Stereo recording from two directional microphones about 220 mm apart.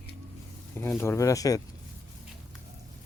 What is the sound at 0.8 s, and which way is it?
Speech, 10° left (ahead or behind).